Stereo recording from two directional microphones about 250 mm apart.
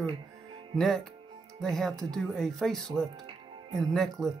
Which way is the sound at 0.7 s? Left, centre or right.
Centre.